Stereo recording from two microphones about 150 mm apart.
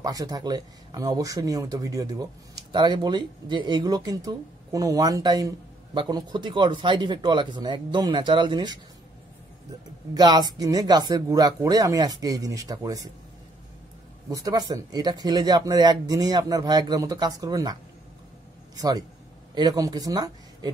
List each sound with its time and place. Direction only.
0.0 s speech: 25° right (ahead or behind)
10.1 s speech: 25° right (ahead or behind)
14.3 s speech: 25° right (ahead or behind)
18.8 s speech: 25° right (ahead or behind)